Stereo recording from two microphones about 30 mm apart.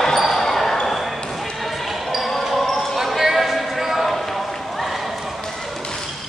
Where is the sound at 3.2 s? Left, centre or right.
Centre.